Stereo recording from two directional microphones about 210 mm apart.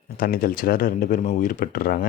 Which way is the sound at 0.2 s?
40° left (ahead or behind).